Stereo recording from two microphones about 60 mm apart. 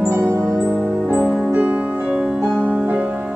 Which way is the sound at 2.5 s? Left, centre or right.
Right.